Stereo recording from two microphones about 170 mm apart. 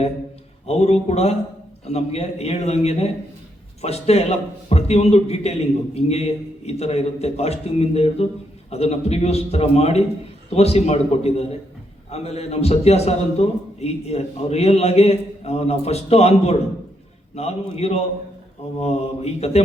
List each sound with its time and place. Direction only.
0.7 s a man's voice: 40° left (ahead or behind)